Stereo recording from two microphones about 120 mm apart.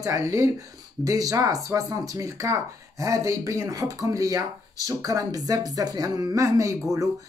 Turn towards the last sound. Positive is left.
turn(degrees=-25)  # may be behind; listen again after turning